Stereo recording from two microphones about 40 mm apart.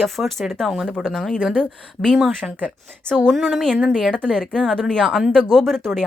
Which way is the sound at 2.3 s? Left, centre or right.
Right.